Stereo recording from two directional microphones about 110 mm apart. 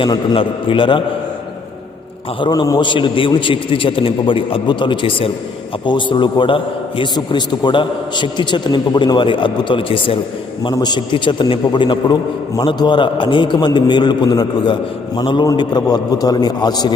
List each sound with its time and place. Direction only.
0.0 s a man's voice: 50° left (ahead or behind)
2.4 s a man's voice: 40° left (ahead or behind)
10.6 s a man's voice: 40° left (ahead or behind)